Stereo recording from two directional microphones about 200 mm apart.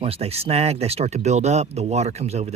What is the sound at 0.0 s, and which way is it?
Speech, 30° right (ahead or behind).